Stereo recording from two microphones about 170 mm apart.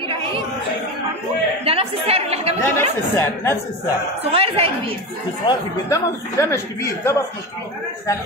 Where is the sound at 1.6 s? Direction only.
35° right (ahead or behind).